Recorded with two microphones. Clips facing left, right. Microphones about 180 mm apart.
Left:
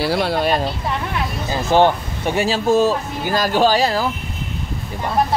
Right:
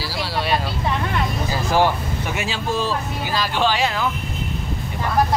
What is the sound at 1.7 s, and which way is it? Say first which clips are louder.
Speech: left 5 dB; 25° left (ahead or behind).